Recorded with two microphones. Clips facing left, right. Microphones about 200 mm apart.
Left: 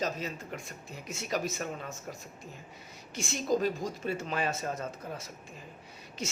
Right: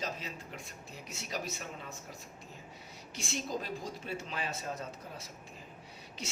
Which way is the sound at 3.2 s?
45° left (ahead or behind).